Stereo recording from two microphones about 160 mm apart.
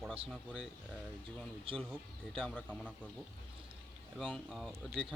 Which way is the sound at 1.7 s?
35° right (ahead or behind).